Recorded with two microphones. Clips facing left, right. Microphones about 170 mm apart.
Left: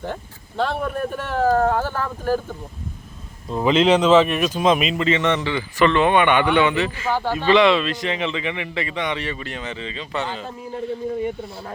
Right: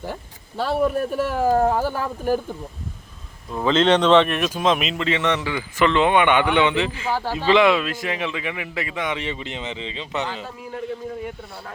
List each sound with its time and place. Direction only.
0.0 s speech: 5° right (ahead or behind)
3.5 s speech: 15° left (ahead or behind); by 9.2 s 5° right (ahead or behind)
9.2 s speech: 20° right (ahead or behind)